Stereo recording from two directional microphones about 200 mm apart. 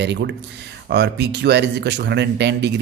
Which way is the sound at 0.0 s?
60° right (ahead or behind).